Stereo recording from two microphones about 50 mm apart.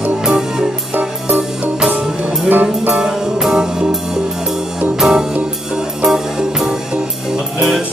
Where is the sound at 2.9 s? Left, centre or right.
Centre.